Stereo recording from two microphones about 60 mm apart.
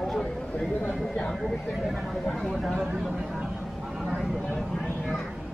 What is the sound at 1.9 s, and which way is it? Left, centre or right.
Speech, centre.